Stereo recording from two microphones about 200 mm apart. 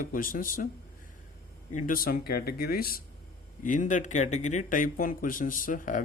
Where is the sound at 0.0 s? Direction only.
45° left (ahead or behind).